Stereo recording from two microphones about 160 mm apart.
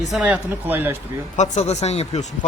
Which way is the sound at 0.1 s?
10° right (ahead or behind).